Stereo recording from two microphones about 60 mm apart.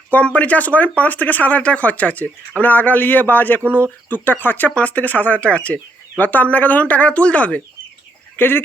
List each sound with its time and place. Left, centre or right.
0.1 s speech: left
3.6 s speech: right
4.1 s speech: left
8.4 s speech: left